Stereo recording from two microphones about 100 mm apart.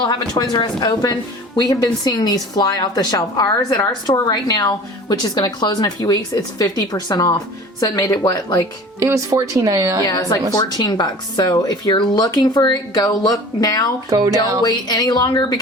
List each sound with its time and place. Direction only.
0.0 s a woman's voice: 45° left (ahead or behind)
9.0 s speech: 35° right (ahead or behind)
10.0 s a woman's voice: 40° left (ahead or behind)